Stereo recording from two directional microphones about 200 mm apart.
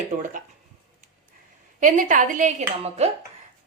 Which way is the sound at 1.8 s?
40° right (ahead or behind).